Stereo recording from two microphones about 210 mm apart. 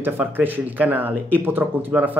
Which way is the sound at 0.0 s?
10° right (ahead or behind).